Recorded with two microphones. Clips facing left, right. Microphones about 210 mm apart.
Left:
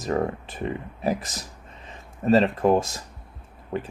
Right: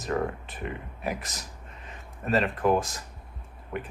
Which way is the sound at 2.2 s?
30° left (ahead or behind).